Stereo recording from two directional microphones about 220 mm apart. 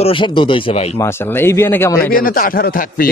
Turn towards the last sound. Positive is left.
turn(degrees=40)  # may be behind; listen again after turning